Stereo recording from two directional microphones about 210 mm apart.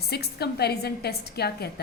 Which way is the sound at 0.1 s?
50° left (ahead or behind).